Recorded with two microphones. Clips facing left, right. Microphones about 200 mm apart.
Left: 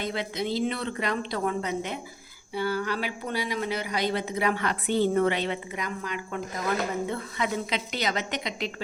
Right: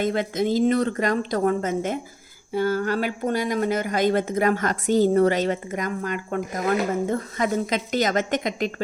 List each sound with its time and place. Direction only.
0.0 s speech: 45° right (ahead or behind)